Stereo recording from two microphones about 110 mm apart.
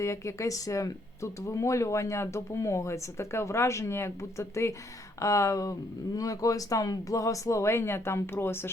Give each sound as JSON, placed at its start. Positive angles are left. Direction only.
{"t": 0.0, "sound": "speech", "side_deg": 25}